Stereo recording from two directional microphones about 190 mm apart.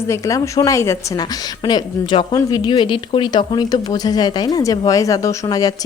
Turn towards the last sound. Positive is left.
turn(degrees=20)  # may be behind; listen again after turning